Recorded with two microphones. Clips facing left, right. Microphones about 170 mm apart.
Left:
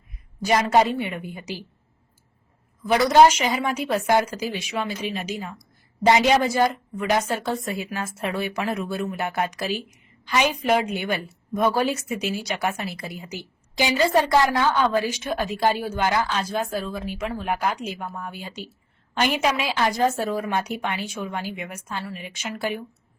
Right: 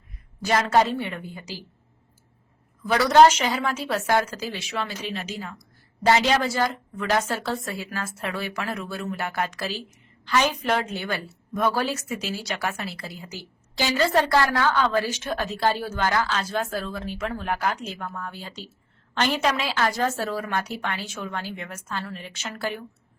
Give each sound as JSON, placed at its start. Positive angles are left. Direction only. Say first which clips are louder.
{"t": 0.4, "sound": "a woman's voice", "louder": "left 2 dB", "side_deg": 15}
{"t": 2.8, "sound": "a woman's voice", "louder": "left 1 dB", "side_deg": 15}